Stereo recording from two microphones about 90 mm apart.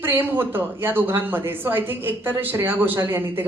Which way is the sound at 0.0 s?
25° right (ahead or behind).